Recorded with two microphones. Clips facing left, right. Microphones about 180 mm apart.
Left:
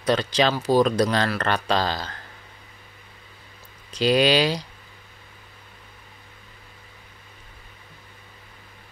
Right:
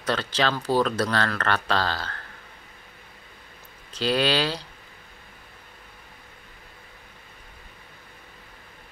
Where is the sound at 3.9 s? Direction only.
15° left (ahead or behind).